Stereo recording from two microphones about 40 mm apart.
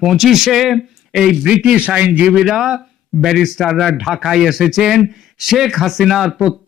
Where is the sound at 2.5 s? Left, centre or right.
Centre.